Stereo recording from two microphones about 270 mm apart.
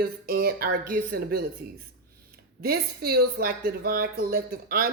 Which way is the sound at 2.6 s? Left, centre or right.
Right.